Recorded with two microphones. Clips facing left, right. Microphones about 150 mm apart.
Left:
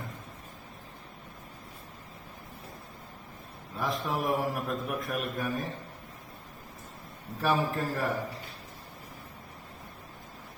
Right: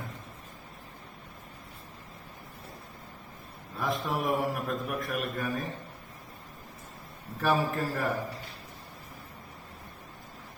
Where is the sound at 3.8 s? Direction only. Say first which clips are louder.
Even; centre (ahead or behind).